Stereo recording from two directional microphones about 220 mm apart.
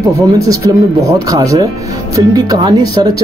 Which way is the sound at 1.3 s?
15° right (ahead or behind).